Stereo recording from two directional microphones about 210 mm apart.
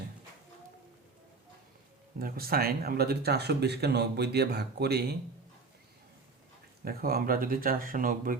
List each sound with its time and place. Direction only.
2.1 s speech: 45° right (ahead or behind)
6.8 s speech: 45° right (ahead or behind)